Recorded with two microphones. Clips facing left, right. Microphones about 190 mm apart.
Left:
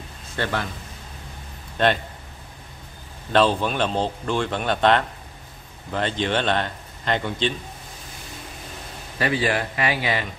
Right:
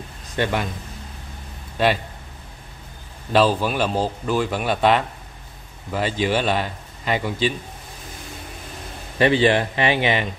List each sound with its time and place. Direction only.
0.4 s speech: 15° right (ahead or behind)
1.8 s speech: 5° right (ahead or behind)
3.3 s speech: 5° right (ahead or behind)
9.2 s speech: 25° right (ahead or behind)